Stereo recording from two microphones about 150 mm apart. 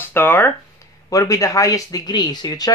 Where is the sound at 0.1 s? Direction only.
15° left (ahead or behind).